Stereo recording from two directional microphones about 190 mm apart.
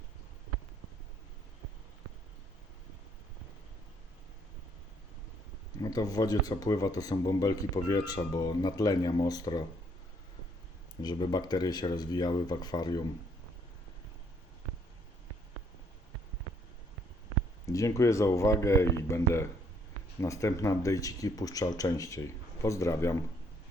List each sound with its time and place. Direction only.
5.8 s speech: 20° left (ahead or behind)
11.0 s speech: 20° left (ahead or behind)
17.7 s speech: 15° left (ahead or behind)